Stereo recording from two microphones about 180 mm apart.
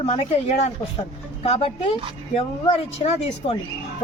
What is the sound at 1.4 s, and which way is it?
Speech, 35° left (ahead or behind).